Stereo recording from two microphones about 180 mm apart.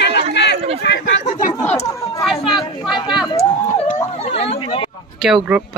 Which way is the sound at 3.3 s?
30° left (ahead or behind).